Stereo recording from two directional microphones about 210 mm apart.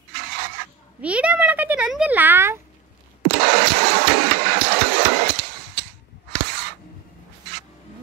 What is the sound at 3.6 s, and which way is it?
Engine, 45° right (ahead or behind).